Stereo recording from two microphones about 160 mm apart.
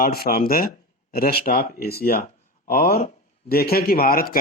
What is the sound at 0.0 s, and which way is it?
A man's voice, 70° left (ahead or behind).